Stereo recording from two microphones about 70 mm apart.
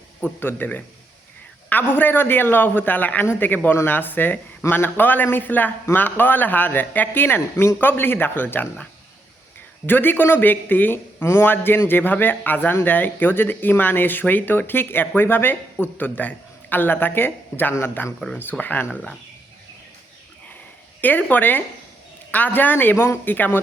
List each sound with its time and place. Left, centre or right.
0.3 s speech: left
9.8 s speech: left
21.0 s speech: left